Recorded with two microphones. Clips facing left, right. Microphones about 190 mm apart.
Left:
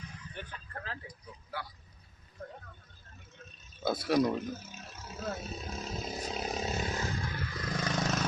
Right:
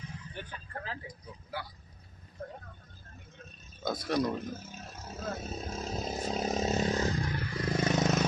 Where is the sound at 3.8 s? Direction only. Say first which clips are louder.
Left 3 dB; 5° left (ahead or behind).